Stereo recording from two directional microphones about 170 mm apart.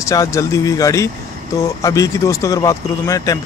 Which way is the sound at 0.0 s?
20° left (ahead or behind).